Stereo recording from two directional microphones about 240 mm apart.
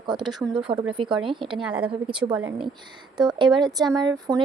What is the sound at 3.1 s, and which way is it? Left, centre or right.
Speech, centre.